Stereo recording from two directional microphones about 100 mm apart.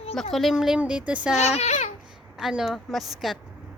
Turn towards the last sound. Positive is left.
turn(degrees=0)  # may be behind; listen again after turning